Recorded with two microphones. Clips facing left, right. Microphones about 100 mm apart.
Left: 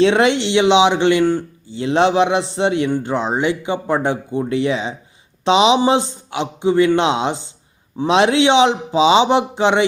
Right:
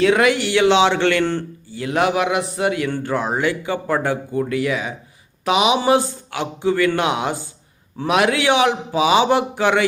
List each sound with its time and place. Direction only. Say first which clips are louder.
0.0 s a man's voice: left 2 dB; 25° left (ahead or behind)
1.7 s a man's voice: left 4 dB; 25° left (ahead or behind)